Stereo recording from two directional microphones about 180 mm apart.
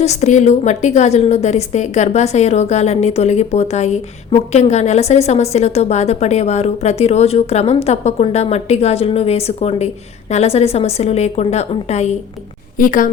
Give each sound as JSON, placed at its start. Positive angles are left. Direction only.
{"t": 0.0, "sound": "a woman's voice", "side_deg": 40}
{"t": 12.7, "sound": "a woman's voice", "side_deg": 50}